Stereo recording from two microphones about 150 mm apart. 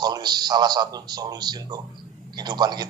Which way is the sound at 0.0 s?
25° right (ahead or behind).